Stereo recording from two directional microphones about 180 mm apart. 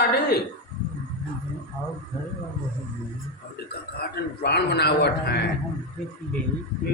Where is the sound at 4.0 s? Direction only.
65° left (ahead or behind).